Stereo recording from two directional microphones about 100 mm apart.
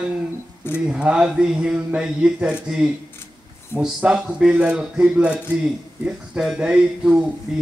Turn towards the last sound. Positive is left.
turn(degrees=-10)  # may be behind; listen again after turning